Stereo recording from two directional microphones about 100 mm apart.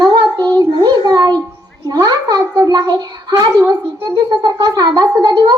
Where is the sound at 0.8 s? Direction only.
40° right (ahead or behind).